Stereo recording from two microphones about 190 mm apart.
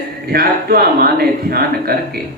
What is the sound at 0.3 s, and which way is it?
Speech, 55° right (ahead or behind).